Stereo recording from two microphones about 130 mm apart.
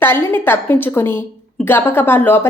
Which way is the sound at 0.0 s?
15° left (ahead or behind).